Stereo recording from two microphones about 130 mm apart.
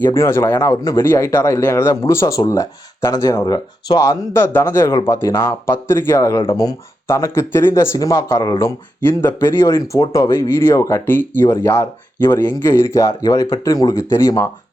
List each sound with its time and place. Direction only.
0.0 s speech: 20° left (ahead or behind)